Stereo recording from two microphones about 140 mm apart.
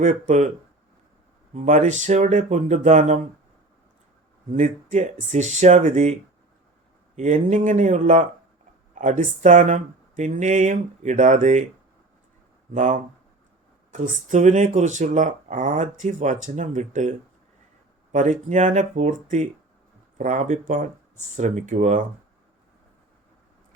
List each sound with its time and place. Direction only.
0.0 s speech: 55° right (ahead or behind)
1.5 s speech: 60° right (ahead or behind)
4.5 s speech: 60° right (ahead or behind)
7.2 s speech: 60° right (ahead or behind)
12.7 s speech: 65° right (ahead or behind)